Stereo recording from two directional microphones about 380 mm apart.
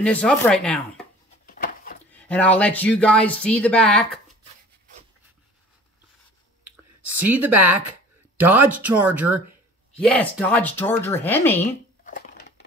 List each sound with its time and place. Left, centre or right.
0.0 s speech: centre
1.4 s a sound: left
2.1 s speech: centre
6.8 s a sound: centre
8.4 s speech: centre
12.0 s crushing: left